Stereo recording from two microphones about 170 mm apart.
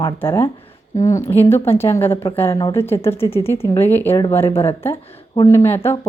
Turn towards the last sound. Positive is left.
turn(degrees=15)  # may be behind; listen again after turning